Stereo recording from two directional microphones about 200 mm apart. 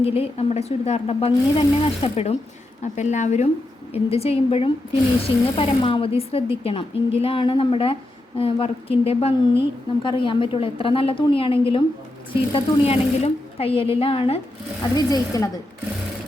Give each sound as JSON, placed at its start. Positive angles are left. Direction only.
{"t": 0.0, "sound": "a woman's voice", "side_deg": 30}